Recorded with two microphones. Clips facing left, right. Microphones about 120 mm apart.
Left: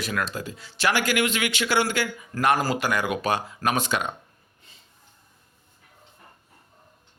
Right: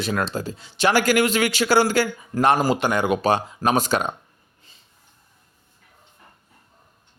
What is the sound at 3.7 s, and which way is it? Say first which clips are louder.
Speech: right 5 dB; 40° right (ahead or behind).